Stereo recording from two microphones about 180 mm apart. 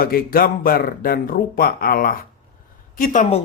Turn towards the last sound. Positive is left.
turn(degrees=45)  # may be behind; listen again after turning